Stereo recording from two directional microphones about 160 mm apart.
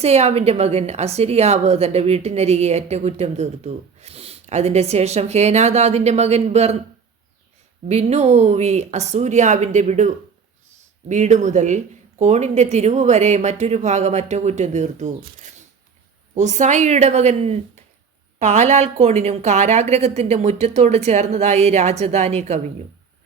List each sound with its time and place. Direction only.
0.0 s a woman's voice: 40° right (ahead or behind)
7.9 s a woman's voice: 40° right (ahead or behind)
11.1 s a woman's voice: 45° right (ahead or behind)
16.3 s a woman's voice: 50° right (ahead or behind)